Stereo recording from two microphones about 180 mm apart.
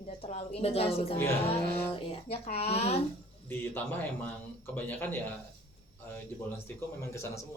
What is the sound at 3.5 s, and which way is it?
Speech, 10° left (ahead or behind).